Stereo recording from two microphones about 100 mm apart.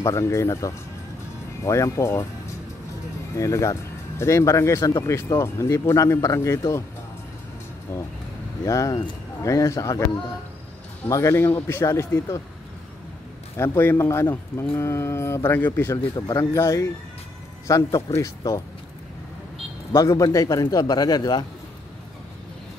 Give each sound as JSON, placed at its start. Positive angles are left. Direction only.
{"t": 0.0, "sound": "speech", "side_deg": 30}
{"t": 7.9, "sound": "speech", "side_deg": 30}
{"t": 11.1, "sound": "speech", "side_deg": 30}
{"t": 13.6, "sound": "speech", "side_deg": 25}
{"t": 16.2, "sound": "speech", "side_deg": 40}
{"t": 16.5, "sound": "speech", "side_deg": 25}
{"t": 19.9, "sound": "speech", "side_deg": 30}